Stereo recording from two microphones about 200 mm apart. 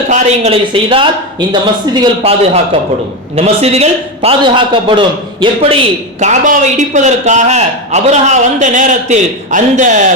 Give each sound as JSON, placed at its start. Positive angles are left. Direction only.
{"t": 0.1, "sound": "a man's voice", "side_deg": -30}